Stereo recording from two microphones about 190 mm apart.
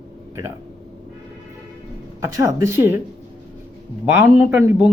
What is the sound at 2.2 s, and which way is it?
Speech, 15° right (ahead or behind).